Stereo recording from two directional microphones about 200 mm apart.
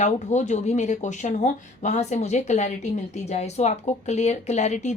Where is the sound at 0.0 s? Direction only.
35° left (ahead or behind).